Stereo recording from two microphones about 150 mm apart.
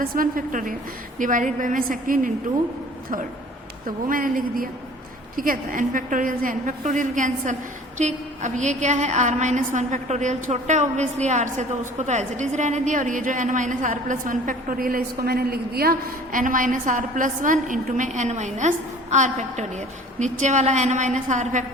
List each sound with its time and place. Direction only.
0.0 s a woman's voice: 70° right (ahead or behind)
3.8 s a woman's voice: 65° right (ahead or behind)